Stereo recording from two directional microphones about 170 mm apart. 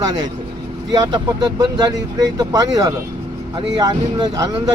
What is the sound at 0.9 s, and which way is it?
Speech, 25° right (ahead or behind).